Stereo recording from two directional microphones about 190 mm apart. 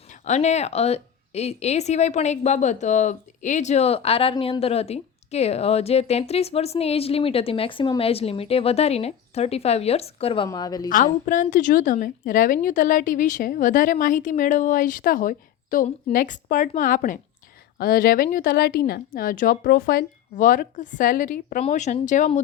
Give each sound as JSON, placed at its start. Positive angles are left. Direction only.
{"t": 0.1, "sound": "speech", "side_deg": 40}
{"t": 10.8, "sound": "a woman's voice", "side_deg": 45}